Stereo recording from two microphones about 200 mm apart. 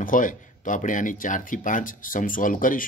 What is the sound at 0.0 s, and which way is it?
Speech, 40° left (ahead or behind).